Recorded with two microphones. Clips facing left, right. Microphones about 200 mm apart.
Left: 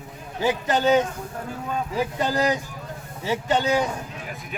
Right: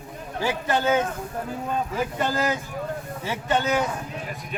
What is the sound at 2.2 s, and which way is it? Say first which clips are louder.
Speech: left 4 dB; 15° left (ahead or behind).